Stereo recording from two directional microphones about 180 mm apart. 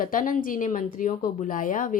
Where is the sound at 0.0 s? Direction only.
50° left (ahead or behind).